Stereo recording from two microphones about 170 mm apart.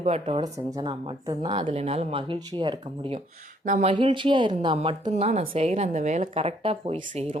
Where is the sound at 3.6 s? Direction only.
45° right (ahead or behind).